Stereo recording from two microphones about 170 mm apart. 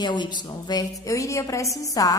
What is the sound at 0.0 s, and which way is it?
A woman's voice, 25° left (ahead or behind).